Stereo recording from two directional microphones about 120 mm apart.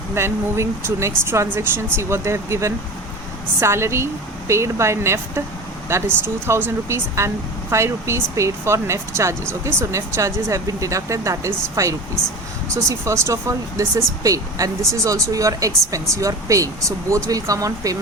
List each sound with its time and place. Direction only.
0.1 s speech: 20° right (ahead or behind)